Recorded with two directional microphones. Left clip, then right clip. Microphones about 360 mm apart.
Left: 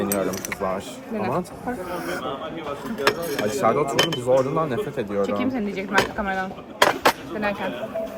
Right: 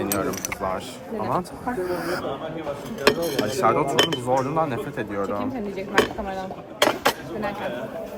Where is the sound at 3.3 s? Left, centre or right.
Centre.